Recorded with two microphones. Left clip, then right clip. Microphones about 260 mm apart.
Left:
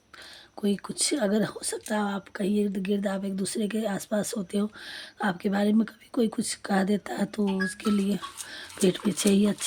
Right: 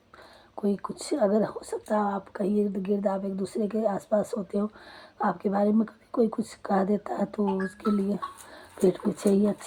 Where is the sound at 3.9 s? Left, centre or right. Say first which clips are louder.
Right 3 dB; left.